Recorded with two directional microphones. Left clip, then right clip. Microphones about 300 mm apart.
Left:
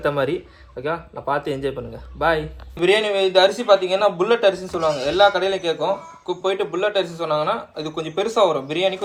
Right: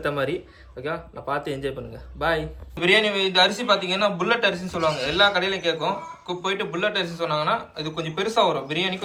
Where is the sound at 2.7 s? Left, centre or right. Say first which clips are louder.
Left 2 dB; left.